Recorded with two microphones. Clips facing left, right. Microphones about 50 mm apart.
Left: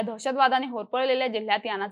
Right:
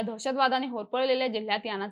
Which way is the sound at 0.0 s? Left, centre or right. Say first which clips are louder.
Left 3 dB; centre.